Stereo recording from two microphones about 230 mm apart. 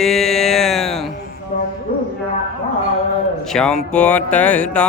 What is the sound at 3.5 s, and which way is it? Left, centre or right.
Music, centre.